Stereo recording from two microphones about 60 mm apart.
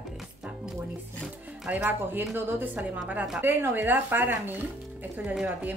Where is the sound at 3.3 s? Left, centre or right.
Right.